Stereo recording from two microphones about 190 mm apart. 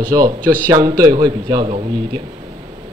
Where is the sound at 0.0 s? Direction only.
20° right (ahead or behind).